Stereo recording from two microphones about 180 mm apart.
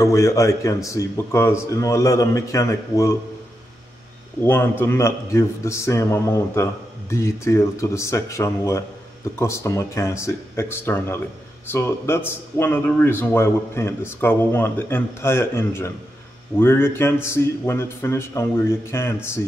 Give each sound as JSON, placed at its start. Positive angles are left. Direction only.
{"t": 0.0, "sound": "speech", "side_deg": 15}
{"t": 4.4, "sound": "speech", "side_deg": 10}